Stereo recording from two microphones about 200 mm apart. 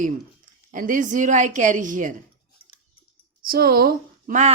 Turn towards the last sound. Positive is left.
turn(degrees=-40)  # may be behind; listen again after turning